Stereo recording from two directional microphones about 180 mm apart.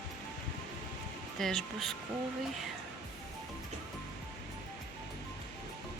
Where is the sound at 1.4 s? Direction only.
Centre (ahead or behind).